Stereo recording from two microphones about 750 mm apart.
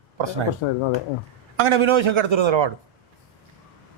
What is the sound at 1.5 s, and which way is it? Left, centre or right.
Speech, right.